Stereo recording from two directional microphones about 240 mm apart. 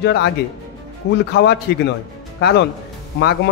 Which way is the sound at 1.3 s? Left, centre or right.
Left.